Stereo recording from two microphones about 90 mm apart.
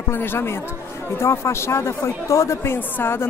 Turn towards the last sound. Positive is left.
turn(degrees=25)  # may be behind; listen again after turning